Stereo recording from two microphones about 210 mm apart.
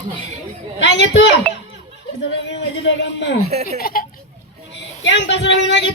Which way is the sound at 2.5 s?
60° left (ahead or behind).